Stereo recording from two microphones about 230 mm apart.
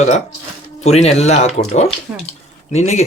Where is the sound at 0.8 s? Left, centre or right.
Left.